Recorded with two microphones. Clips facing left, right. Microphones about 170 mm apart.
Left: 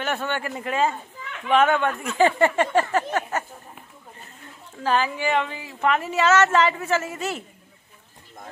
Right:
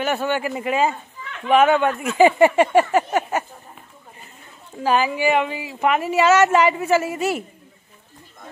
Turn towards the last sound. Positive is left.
turn(degrees=-10)  # may be behind; listen again after turning